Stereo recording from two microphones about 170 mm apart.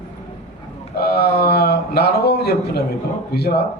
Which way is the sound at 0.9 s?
70° left (ahead or behind).